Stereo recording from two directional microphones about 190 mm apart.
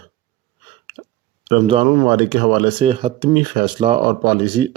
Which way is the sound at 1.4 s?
30° right (ahead or behind).